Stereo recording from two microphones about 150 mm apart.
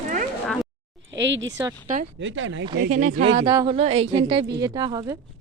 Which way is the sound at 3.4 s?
30° right (ahead or behind).